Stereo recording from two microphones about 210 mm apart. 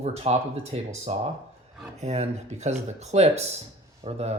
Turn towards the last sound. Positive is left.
turn(degrees=-30)  # may be behind; listen again after turning